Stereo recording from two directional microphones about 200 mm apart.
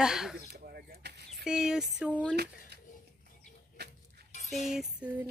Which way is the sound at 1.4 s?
5° right (ahead or behind).